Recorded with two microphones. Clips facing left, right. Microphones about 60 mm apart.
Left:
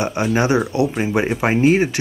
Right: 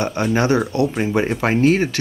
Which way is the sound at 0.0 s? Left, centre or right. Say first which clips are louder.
Even; centre.